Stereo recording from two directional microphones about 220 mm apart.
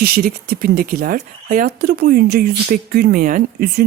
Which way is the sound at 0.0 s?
40° right (ahead or behind).